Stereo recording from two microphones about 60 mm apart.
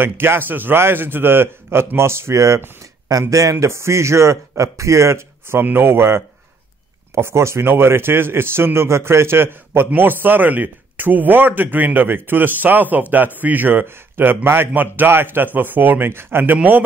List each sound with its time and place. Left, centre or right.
0.0 s a man's voice: right
3.1 s a man's voice: right
5.6 s a man's voice: right